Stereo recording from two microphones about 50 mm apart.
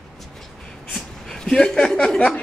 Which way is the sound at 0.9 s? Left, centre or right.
Centre.